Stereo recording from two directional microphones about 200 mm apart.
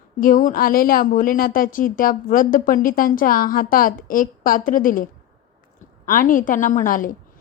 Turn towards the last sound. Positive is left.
turn(degrees=45)  # may be behind; listen again after turning